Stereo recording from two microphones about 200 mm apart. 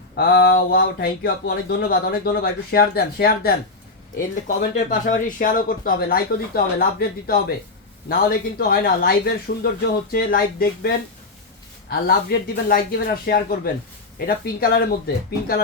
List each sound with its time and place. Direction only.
0.2 s speech: 50° left (ahead or behind)